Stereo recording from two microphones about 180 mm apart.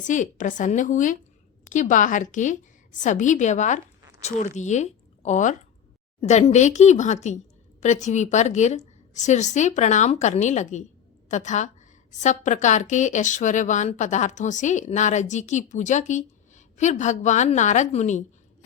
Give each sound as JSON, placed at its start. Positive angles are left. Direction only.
{"t": 0.0, "sound": "a woman's voice", "side_deg": 45}